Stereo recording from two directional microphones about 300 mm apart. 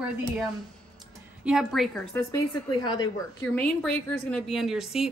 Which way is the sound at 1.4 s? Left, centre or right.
Centre.